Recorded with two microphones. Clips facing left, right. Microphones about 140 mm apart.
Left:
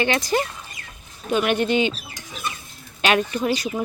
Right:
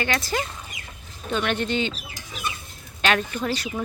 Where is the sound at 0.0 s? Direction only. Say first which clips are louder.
Left 5 dB; 20° left (ahead or behind).